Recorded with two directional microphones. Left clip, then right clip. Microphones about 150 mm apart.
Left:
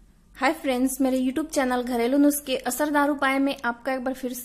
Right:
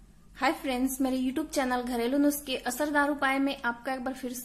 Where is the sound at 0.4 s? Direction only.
30° left (ahead or behind).